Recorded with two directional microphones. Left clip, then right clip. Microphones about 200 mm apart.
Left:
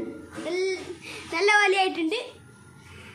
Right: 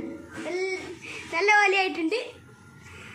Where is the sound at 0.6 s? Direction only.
50° left (ahead or behind).